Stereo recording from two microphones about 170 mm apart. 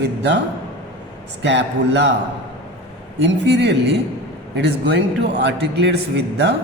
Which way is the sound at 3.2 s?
90° right.